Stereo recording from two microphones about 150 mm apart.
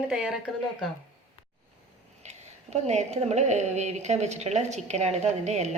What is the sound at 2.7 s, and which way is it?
A woman's voice, 50° right (ahead or behind).